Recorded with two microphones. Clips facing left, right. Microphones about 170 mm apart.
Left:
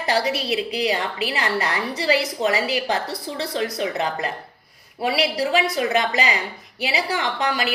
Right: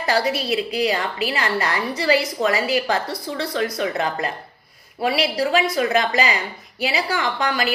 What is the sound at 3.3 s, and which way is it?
Speech, 30° left (ahead or behind).